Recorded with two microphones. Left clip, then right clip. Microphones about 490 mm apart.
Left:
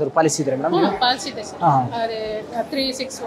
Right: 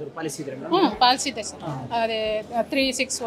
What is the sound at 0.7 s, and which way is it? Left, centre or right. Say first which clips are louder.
Speech: right 3 dB; right.